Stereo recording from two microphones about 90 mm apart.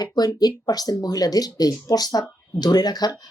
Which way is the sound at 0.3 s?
50° left (ahead or behind).